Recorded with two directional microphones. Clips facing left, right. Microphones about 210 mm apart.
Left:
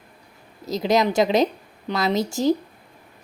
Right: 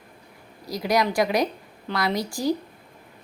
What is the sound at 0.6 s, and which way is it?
Speech, 25° left (ahead or behind).